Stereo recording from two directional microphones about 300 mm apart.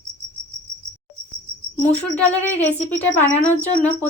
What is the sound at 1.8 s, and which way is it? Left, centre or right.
Speech, centre.